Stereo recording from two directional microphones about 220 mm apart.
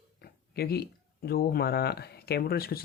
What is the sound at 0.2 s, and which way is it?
Speech, 45° left (ahead or behind).